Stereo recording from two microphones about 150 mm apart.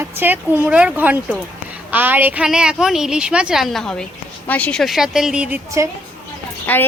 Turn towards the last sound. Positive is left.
turn(degrees=10)  # may be behind; listen again after turning